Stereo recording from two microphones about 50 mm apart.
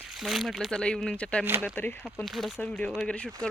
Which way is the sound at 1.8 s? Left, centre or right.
Left.